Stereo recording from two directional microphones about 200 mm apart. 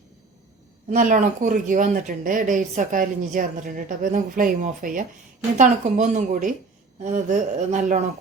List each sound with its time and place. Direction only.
0.9 s speech: 40° right (ahead or behind)